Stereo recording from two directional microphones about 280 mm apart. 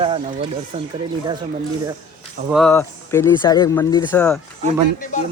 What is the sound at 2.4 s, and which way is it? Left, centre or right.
Speech, centre.